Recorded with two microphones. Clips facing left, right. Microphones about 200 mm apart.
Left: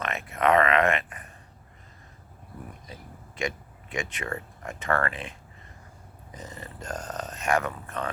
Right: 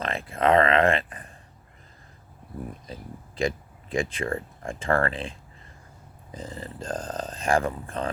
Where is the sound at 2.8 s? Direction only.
30° right (ahead or behind).